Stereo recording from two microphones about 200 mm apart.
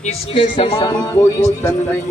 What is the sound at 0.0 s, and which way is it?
Speech, 35° left (ahead or behind).